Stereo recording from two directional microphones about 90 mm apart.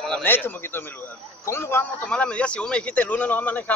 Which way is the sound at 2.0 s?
15° left (ahead or behind).